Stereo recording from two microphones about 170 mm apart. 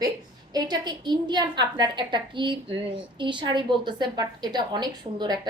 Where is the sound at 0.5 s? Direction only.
25° right (ahead or behind).